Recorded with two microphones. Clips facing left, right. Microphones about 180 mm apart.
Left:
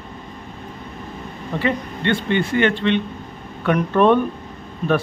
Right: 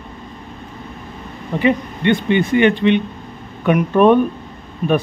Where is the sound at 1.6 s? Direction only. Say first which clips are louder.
Right 6 dB; 15° right (ahead or behind).